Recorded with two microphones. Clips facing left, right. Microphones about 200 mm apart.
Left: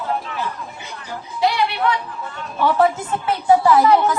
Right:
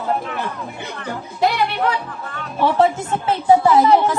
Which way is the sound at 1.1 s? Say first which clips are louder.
Right 1 dB; 55° right (ahead or behind).